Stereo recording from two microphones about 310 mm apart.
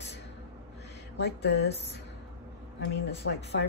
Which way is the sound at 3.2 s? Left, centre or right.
Left.